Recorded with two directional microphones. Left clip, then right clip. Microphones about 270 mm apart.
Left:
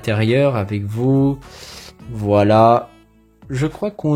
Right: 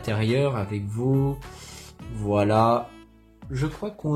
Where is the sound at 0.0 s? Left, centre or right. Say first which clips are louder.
Left 8 dB; left.